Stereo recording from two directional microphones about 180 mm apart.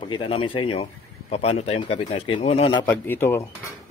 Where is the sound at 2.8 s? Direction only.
10° left (ahead or behind).